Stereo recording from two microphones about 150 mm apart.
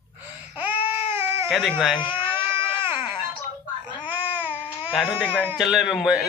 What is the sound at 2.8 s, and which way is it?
Wail, 35° left (ahead or behind).